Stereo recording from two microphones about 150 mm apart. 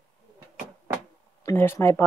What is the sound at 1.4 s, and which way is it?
Speech, 15° left (ahead or behind).